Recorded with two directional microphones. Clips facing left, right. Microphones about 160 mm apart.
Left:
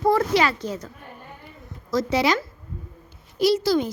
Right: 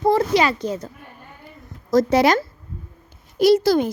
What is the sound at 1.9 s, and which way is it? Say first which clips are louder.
A woman's voice: right 6 dB; 45° right (ahead or behind).